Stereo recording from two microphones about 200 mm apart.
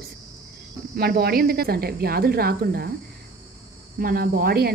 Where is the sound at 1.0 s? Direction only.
50° right (ahead or behind).